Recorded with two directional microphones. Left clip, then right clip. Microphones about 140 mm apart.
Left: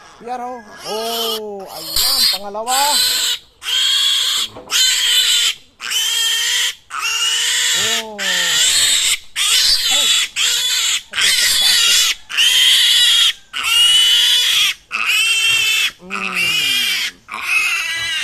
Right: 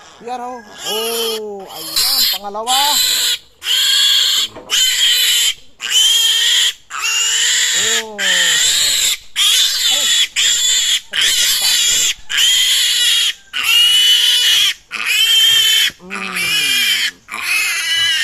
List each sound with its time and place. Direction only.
0.3 s speech: 10° left (ahead or behind)
0.9 s owl: 20° right (ahead or behind)
1.1 s speech: centre (ahead or behind)
1.8 s owl: 20° right (ahead or behind)
2.3 s speech: centre (ahead or behind)
2.6 s owl: 25° right (ahead or behind)
3.0 s a sound: 25° right (ahead or behind)
10.7 s pig: 25° right (ahead or behind)